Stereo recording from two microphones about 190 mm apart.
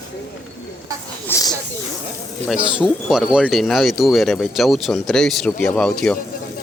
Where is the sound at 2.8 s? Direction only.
5° right (ahead or behind).